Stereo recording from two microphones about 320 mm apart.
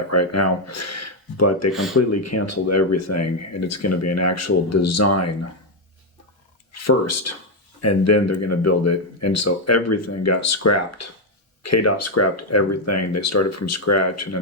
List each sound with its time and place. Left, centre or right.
0.1 s speech: left
1.7 s speech: centre
2.0 s speech: left
6.7 s speech: left